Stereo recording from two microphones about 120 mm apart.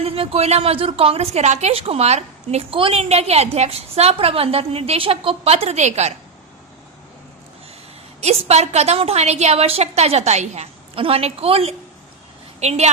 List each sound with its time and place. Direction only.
0.0 s a woman's voice: 55° right (ahead or behind)
8.2 s a woman's voice: 65° right (ahead or behind)
12.5 s a woman's voice: 65° right (ahead or behind)